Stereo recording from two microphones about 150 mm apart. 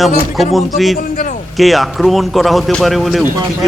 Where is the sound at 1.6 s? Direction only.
Centre (ahead or behind).